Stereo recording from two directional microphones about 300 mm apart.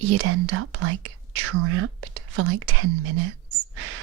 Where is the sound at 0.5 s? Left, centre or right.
Right.